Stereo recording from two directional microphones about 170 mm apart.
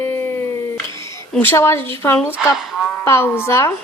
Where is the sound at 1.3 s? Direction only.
10° left (ahead or behind).